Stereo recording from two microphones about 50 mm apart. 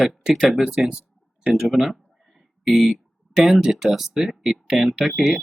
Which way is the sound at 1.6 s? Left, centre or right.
Centre.